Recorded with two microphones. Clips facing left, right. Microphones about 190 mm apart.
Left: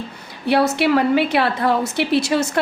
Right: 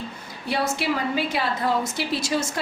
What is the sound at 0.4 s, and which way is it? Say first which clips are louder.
A woman's voice: left 8 dB; 65° left (ahead or behind).